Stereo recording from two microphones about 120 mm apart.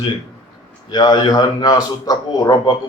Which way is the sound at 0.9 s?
35° left (ahead or behind).